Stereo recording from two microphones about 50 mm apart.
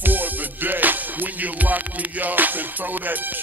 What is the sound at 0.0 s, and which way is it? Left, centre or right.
Music, right.